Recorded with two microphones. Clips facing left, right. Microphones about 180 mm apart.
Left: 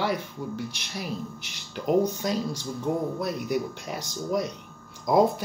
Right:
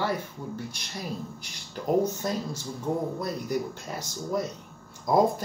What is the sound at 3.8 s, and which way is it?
Speech, 70° left (ahead or behind).